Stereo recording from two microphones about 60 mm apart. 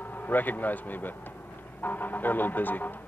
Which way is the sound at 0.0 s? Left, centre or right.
Left.